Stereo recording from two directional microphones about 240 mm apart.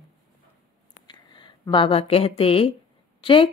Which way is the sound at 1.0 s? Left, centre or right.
Centre.